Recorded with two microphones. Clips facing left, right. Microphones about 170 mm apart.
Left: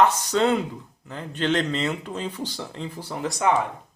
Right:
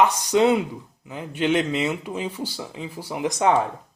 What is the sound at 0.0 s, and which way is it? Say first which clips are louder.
Speech: right 2 dB; 15° right (ahead or behind).